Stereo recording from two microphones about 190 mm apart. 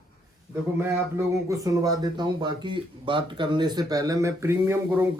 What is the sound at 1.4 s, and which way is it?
Speech, 15° right (ahead or behind).